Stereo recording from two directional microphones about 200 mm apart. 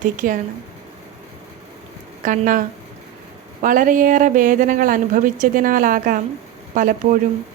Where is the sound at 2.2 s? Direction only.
40° right (ahead or behind).